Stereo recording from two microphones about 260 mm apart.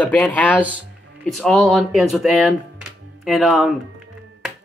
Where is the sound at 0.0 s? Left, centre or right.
Centre.